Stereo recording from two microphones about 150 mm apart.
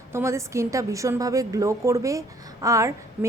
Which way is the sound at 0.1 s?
20° right (ahead or behind).